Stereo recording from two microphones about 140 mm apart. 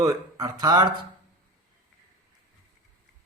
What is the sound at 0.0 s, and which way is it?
Speech, 25° right (ahead or behind).